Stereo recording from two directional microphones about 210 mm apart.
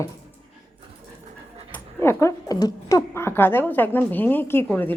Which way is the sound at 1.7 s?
10° left (ahead or behind).